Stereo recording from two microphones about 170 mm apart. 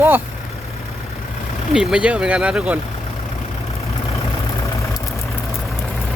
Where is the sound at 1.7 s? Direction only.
5° right (ahead or behind).